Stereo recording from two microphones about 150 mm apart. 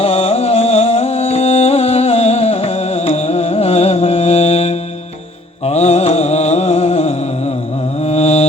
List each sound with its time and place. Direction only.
0.0 s music: 40° left (ahead or behind)
8.0 s mantra: 45° left (ahead or behind)